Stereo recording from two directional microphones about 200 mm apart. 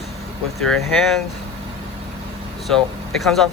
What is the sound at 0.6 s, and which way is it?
Speech, centre (ahead or behind).